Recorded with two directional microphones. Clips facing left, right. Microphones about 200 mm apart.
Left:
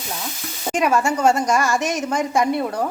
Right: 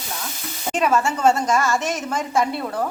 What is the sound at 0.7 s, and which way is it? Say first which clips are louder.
A woman's voice: left 1 dB; 10° left (ahead or behind).